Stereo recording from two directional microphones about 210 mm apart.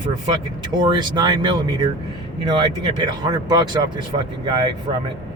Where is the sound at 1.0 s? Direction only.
20° right (ahead or behind).